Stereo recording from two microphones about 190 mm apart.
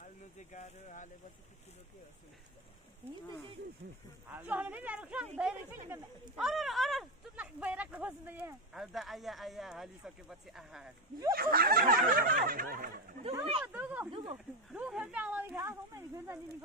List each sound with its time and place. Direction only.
0.0 s speech: 40° left (ahead or behind)
4.3 s speech: 10° right (ahead or behind)
11.3 s speech: 50° right (ahead or behind)
13.7 s speech: 10° right (ahead or behind)
14.1 s speech: 25° right (ahead or behind)
14.7 s speech: 5° right (ahead or behind)